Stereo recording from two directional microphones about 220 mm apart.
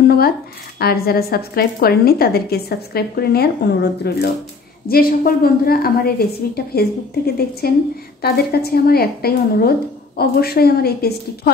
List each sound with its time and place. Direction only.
0.7 s a woman's voice: 45° left (ahead or behind)